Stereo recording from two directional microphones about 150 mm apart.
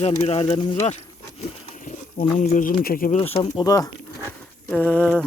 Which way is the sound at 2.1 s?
60° left (ahead or behind).